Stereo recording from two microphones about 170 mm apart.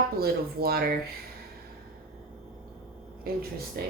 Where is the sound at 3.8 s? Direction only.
70° right (ahead or behind).